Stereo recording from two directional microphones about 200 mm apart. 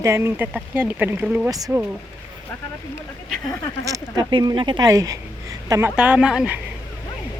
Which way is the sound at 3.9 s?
20° right (ahead or behind).